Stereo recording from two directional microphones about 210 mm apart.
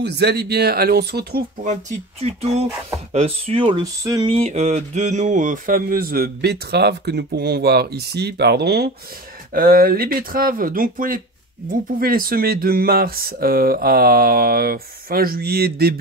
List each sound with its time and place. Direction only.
0.0 s speech: 50° right (ahead or behind)
1.7 s speech: 30° right (ahead or behind); by 4.3 s 15° right (ahead or behind)
4.3 s speech: 30° right (ahead or behind); by 16.0 s 45° right (ahead or behind)